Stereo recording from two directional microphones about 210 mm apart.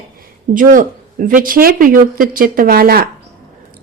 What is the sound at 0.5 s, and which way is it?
A woman's voice, 40° right (ahead or behind).